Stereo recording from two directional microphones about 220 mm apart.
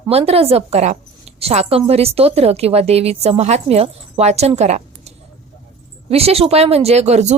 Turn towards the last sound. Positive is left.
turn(degrees=-30)  # may be behind; listen again after turning